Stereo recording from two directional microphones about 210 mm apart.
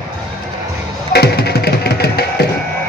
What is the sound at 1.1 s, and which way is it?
Music, 50° left (ahead or behind).